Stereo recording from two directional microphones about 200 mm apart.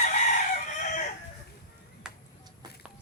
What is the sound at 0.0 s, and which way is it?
Chicken, 40° left (ahead or behind).